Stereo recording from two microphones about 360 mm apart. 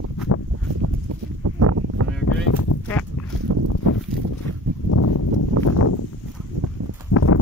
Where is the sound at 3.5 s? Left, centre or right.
Right.